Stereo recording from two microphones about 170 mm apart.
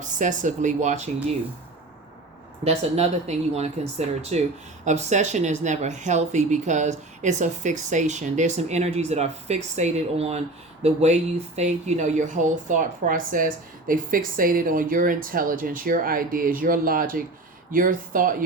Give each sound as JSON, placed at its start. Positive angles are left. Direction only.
{"t": 0.0, "sound": "speech", "side_deg": -45}
{"t": 2.6, "sound": "speech", "side_deg": -40}